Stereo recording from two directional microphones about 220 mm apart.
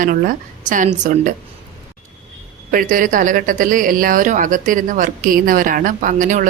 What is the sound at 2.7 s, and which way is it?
A woman's voice, 40° right (ahead or behind).